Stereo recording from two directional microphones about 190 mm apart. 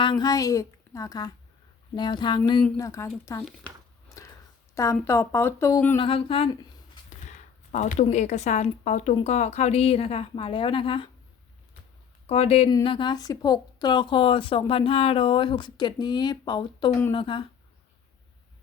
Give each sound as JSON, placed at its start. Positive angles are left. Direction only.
{"t": 0.0, "sound": "a woman's voice", "side_deg": 20}
{"t": 4.7, "sound": "a woman's voice", "side_deg": 15}
{"t": 6.0, "sound": "a woman's voice", "side_deg": 30}
{"t": 7.3, "sound": "a sound", "side_deg": 40}
{"t": 8.0, "sound": "a woman's voice", "side_deg": 40}
{"t": 12.3, "sound": "a woman's voice", "side_deg": 30}